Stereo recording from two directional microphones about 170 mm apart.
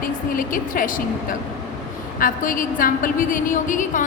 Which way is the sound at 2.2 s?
55° left (ahead or behind).